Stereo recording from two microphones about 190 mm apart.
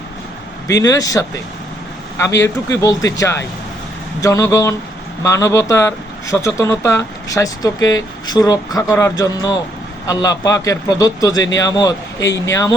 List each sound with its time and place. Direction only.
0.7 s a man's voice: 20° left (ahead or behind)